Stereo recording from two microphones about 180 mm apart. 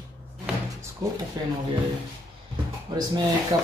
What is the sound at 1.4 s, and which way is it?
Speech, 20° right (ahead or behind).